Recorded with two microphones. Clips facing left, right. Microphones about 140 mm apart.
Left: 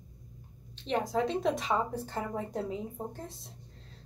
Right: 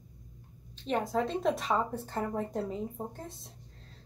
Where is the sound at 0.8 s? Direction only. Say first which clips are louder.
Even; centre (ahead or behind).